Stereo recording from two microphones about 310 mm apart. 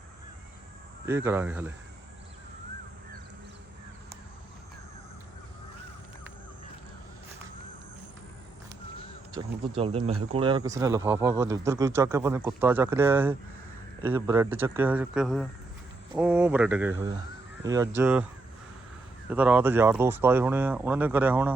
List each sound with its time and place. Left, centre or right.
1.0 s speech: centre
9.3 s speech: centre
19.3 s speech: centre